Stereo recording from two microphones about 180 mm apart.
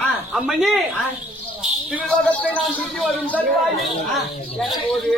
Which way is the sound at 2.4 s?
5° left (ahead or behind).